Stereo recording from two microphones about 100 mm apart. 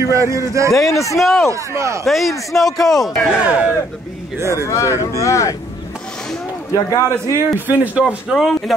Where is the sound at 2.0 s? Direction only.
Centre (ahead or behind).